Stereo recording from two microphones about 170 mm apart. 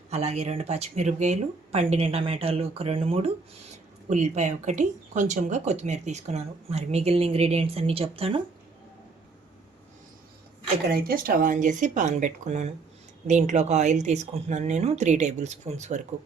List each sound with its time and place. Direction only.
0.1 s speech: 40° right (ahead or behind)
10.8 s speech: 60° right (ahead or behind); by 16.0 s 45° right (ahead or behind)